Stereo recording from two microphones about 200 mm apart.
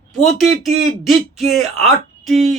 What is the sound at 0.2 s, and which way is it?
Speech, centre (ahead or behind).